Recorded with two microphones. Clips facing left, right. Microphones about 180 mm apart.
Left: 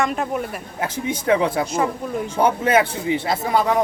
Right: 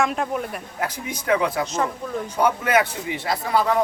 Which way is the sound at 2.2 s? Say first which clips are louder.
Left 3 dB; 25° left (ahead or behind).